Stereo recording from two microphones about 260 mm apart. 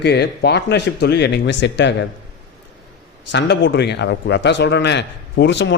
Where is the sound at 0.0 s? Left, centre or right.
Left.